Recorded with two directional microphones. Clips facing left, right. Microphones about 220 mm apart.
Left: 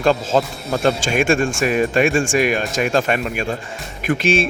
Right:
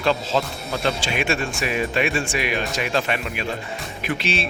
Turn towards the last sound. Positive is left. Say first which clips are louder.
# left 7 dB
turn(degrees=50)  # may be behind; listen again after turning